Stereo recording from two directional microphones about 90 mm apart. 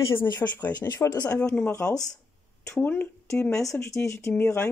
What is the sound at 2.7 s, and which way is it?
Speech, 20° left (ahead or behind).